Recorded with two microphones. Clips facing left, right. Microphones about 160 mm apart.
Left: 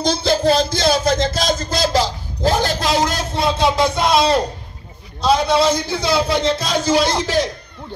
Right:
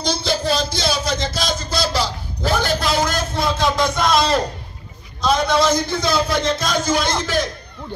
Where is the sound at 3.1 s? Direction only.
30° left (ahead or behind).